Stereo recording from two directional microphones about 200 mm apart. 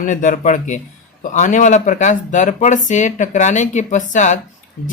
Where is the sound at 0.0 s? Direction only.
40° left (ahead or behind).